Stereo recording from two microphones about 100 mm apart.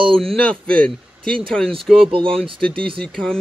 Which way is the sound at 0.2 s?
5° left (ahead or behind).